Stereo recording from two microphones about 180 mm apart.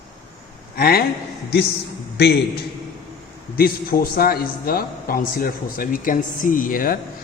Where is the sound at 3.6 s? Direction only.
55° left (ahead or behind).